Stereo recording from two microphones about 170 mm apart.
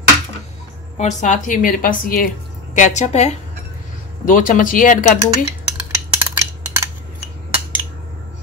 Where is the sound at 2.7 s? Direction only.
45° left (ahead or behind).